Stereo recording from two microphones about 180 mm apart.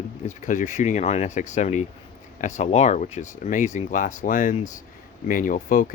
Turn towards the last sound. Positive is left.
turn(degrees=50)  # may be behind; listen again after turning